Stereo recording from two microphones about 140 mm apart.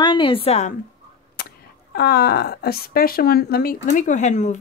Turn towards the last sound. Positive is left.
turn(degrees=60)  # may be behind; listen again after turning